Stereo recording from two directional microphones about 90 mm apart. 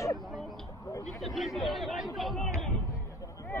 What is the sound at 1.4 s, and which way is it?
Speech, centre (ahead or behind).